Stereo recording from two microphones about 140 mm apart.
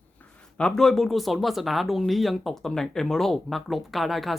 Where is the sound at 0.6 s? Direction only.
5° left (ahead or behind).